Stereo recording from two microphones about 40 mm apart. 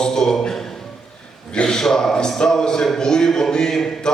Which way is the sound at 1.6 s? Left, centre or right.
Centre.